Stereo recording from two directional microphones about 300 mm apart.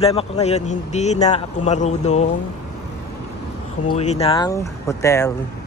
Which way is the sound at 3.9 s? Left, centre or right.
Left.